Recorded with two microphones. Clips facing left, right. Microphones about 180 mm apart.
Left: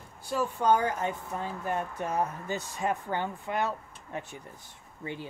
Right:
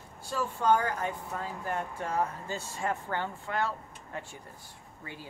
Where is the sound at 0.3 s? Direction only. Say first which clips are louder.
Left 1 dB; 15° left (ahead or behind).